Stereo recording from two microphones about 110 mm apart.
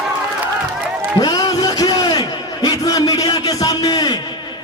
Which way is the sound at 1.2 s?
40° left (ahead or behind).